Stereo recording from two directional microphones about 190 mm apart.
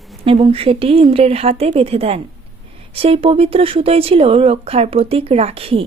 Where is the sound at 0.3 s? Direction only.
30° right (ahead or behind).